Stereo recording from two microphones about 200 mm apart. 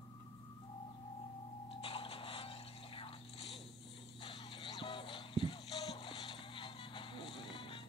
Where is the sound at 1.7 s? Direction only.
25° left (ahead or behind).